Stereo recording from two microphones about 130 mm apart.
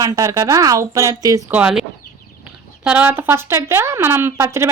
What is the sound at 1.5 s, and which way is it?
Speech, 15° right (ahead or behind).